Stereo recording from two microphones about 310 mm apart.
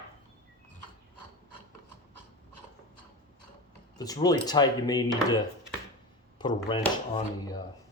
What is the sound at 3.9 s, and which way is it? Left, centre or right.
Speech, centre.